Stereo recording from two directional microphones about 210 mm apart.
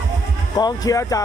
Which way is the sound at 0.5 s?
15° left (ahead or behind).